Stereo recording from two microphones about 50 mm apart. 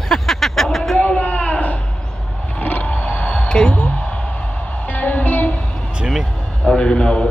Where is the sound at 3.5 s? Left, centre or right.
Centre.